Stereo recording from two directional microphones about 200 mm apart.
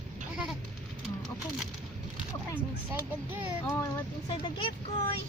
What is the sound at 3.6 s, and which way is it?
Speech, 15° left (ahead or behind).